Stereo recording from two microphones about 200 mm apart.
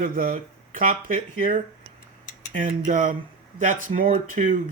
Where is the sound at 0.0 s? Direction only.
45° right (ahead or behind).